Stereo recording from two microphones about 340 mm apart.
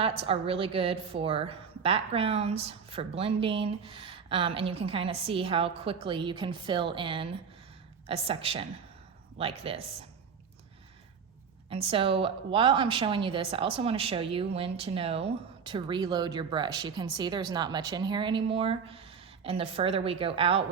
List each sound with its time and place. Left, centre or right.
0.0 s a woman's voice: centre
11.7 s a woman's voice: centre